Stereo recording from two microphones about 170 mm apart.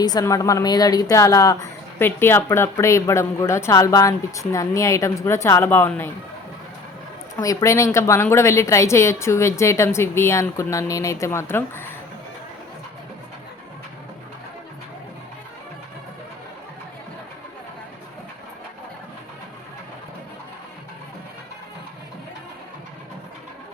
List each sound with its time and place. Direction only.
0.0 s a woman's voice: 20° left (ahead or behind)
7.3 s a woman's voice: 20° left (ahead or behind)